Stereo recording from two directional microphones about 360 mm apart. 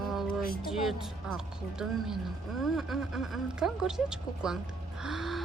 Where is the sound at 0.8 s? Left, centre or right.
Centre.